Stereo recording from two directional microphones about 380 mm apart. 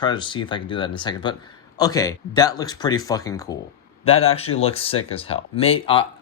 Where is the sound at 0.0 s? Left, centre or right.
Centre.